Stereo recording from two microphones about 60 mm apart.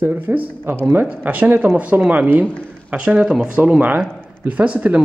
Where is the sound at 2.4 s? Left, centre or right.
Centre.